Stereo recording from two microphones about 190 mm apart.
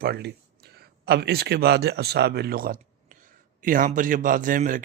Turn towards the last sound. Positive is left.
turn(degrees=-45)  # may be behind; listen again after turning